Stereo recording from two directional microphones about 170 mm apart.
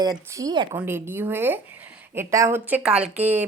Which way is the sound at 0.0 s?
20° right (ahead or behind).